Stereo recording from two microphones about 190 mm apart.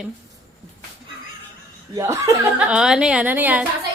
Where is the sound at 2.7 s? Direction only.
5° right (ahead or behind).